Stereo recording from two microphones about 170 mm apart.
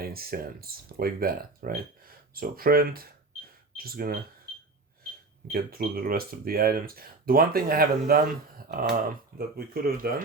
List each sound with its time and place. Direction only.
0.0 s speech: 60° right (ahead or behind)
5.5 s speech: 60° right (ahead or behind)